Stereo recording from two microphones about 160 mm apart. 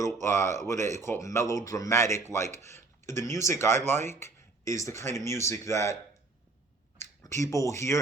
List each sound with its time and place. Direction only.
0.0 s speech: 15° left (ahead or behind)
7.2 s speech: 20° left (ahead or behind)